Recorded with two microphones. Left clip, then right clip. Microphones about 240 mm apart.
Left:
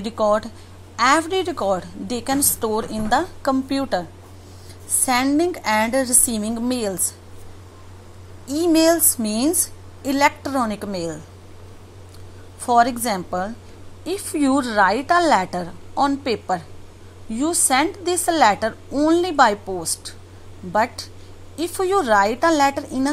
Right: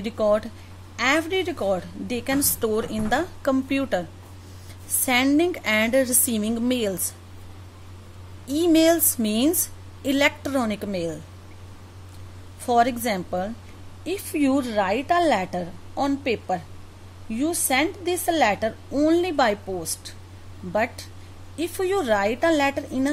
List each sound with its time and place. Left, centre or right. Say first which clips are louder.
0.0 s a woman's voice: left 2 dB; centre
5.1 s a woman's voice: left 1 dB; centre
8.5 s a woman's voice: left 2 dB; centre
12.6 s a woman's voice: left 4 dB; centre